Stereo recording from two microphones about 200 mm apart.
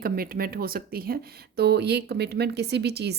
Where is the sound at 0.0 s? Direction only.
50° right (ahead or behind).